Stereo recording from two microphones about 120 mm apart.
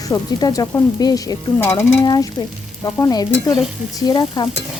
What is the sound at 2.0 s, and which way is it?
Speech, 35° left (ahead or behind).